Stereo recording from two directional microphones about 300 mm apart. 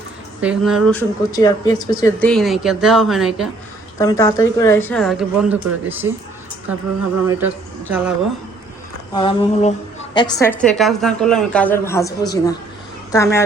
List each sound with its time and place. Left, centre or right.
0.4 s speech: centre
3.9 s a woman's voice: centre
7.3 s speech: centre
9.1 s a woman's voice: centre